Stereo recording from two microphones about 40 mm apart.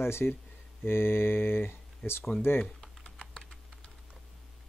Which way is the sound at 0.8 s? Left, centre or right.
Left.